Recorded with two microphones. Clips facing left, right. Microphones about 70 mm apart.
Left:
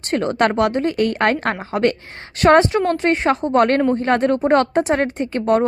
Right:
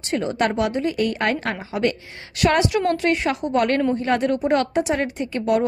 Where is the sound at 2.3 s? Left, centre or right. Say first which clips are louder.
Left 6 dB; left.